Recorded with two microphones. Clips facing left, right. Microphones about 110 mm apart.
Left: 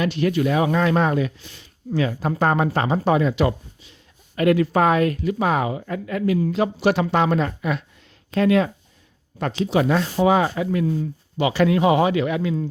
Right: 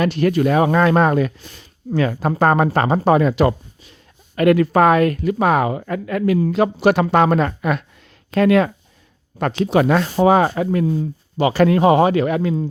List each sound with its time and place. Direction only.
0.0 s speech: 50° right (ahead or behind); by 10.1 s 65° right (ahead or behind)
10.2 s speech: 45° right (ahead or behind)
10.8 s speech: 35° right (ahead or behind)